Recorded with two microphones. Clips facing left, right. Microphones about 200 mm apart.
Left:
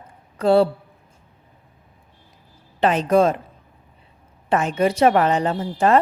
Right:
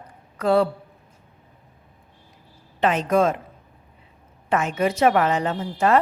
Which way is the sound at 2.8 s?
35° left (ahead or behind).